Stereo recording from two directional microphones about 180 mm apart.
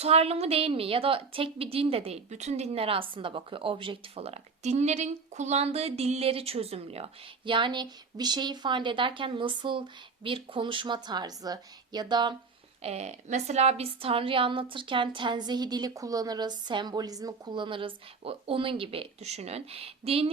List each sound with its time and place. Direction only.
0.0 s a woman's voice: 35° right (ahead or behind)
12.8 s a woman's voice: 35° right (ahead or behind)